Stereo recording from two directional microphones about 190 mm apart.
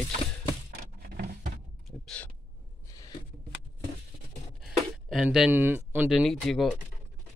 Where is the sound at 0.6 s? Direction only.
50° right (ahead or behind).